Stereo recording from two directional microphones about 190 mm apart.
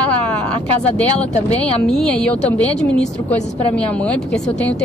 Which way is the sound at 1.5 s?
5° left (ahead or behind).